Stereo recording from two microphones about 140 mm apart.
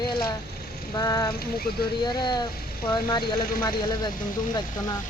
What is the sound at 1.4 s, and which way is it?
Speech, 90° left.